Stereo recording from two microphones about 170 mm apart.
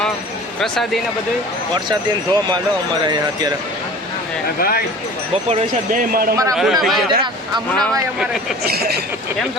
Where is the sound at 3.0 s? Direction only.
25° right (ahead or behind).